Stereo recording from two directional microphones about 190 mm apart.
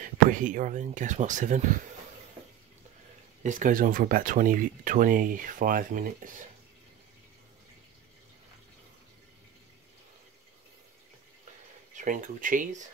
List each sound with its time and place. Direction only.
0.0 s speech: 45° right (ahead or behind)
3.4 s speech: 45° right (ahead or behind)
12.0 s speech: 45° right (ahead or behind)